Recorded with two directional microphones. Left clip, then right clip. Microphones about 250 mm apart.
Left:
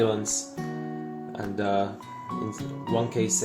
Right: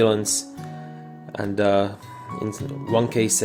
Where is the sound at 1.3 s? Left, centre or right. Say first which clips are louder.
Right 7 dB; right.